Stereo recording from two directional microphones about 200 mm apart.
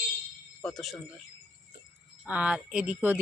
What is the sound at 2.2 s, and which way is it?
Speech, 5° right (ahead or behind).